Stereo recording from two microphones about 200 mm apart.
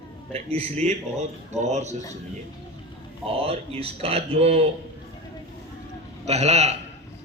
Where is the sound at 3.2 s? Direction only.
30° right (ahead or behind).